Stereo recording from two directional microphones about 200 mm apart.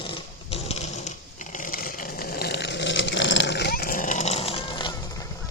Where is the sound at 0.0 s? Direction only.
30° left (ahead or behind).